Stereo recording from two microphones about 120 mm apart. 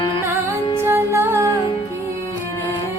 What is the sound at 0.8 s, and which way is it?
Music, 20° right (ahead or behind).